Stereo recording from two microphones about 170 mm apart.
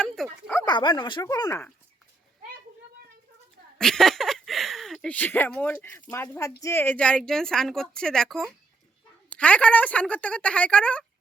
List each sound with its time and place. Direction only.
0.0 s a sound: centre (ahead or behind)
0.6 s speech: 25° left (ahead or behind)
3.8 s speech: centre (ahead or behind)